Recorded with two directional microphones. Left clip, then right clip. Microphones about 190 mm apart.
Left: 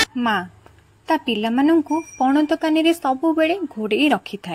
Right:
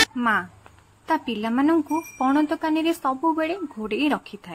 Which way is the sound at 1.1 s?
20° left (ahead or behind).